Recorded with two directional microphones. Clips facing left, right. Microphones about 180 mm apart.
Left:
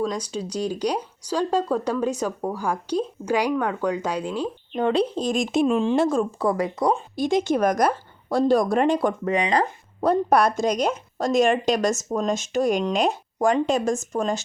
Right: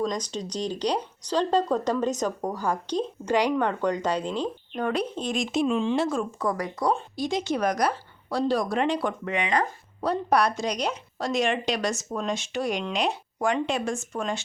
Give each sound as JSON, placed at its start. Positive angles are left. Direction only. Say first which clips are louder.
{"t": 0.0, "sound": "speech", "louder": "left 2 dB", "side_deg": 10}
{"t": 4.8, "sound": "speech", "louder": "left 6 dB", "side_deg": 30}
{"t": 7.2, "sound": "speech", "louder": "left 5 dB", "side_deg": 50}
{"t": 10.0, "sound": "speech", "louder": "left 4 dB", "side_deg": 50}